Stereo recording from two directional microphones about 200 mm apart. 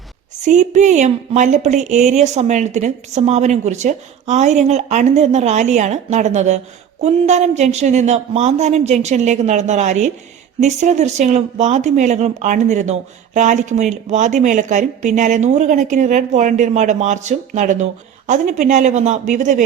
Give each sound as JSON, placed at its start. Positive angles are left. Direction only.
{"t": 0.4, "sound": "speech", "side_deg": -35}